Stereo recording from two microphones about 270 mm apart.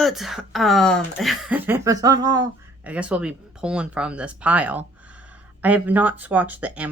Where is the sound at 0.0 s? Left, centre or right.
Centre.